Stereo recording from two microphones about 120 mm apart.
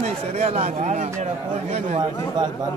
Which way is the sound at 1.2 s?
70° right (ahead or behind).